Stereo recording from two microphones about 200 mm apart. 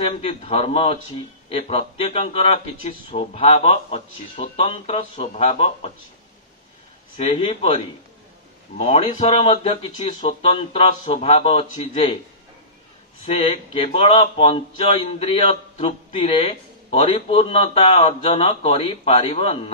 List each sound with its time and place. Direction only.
0.0 s speech: 30° left (ahead or behind)
7.2 s speech: 25° left (ahead or behind)
13.2 s speech: 30° left (ahead or behind)